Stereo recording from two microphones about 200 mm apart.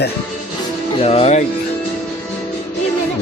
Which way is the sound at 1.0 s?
30° left (ahead or behind).